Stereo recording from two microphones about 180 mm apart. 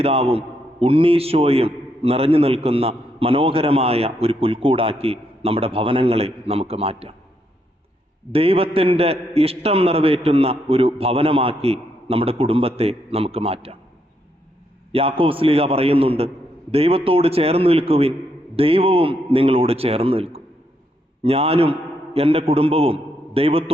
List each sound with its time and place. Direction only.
0.0 s a man's voice: 35° right (ahead or behind)
8.3 s a man's voice: 30° right (ahead or behind)
14.9 s a man's voice: 30° right (ahead or behind)